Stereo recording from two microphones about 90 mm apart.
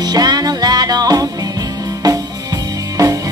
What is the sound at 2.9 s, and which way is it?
Music, 40° right (ahead or behind).